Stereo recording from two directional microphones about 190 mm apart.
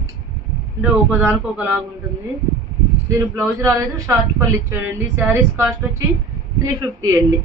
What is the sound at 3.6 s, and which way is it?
Speech, 15° right (ahead or behind).